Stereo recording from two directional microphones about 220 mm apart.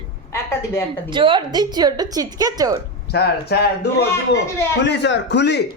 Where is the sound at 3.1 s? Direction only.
50° left (ahead or behind).